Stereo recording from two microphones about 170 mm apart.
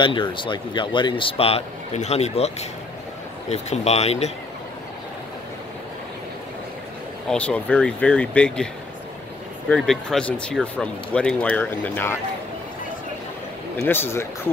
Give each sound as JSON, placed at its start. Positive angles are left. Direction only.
{"t": 0.0, "sound": "a man's voice", "side_deg": 30}
{"t": 7.2, "sound": "speech", "side_deg": 5}
{"t": 9.7, "sound": "speech", "side_deg": 5}
{"t": 13.8, "sound": "speech", "side_deg": 15}